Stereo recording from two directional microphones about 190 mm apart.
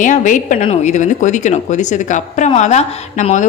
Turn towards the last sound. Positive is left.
turn(degrees=40)  # may be behind; listen again after turning